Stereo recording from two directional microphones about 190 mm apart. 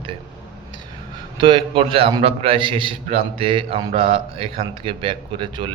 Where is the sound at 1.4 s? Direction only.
25° right (ahead or behind).